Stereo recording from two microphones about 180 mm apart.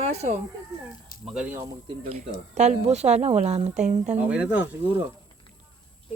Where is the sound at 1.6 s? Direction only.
30° right (ahead or behind).